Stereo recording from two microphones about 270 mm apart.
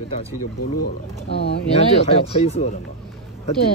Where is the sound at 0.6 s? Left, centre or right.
Left.